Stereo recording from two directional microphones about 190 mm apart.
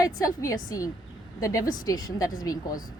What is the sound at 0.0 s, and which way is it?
A woman's voice, 20° left (ahead or behind).